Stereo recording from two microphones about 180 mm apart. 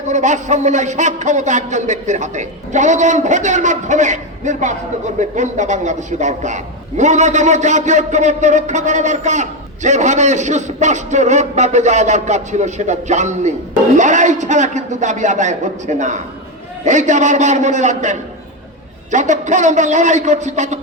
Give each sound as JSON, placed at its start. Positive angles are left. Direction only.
{"t": 0.1, "sound": "a man's voice", "side_deg": -40}